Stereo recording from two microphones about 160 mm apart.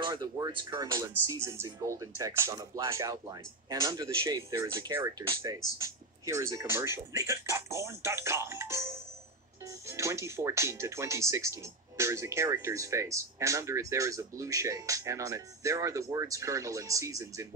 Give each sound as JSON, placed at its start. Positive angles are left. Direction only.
{"t": 0.0, "sound": "speech", "side_deg": -25}